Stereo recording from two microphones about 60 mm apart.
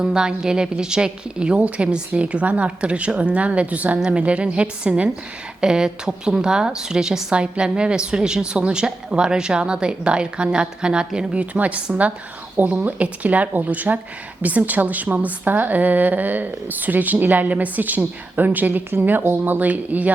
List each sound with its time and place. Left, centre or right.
0.0 s a woman's voice: centre
11.3 s a woman's voice: right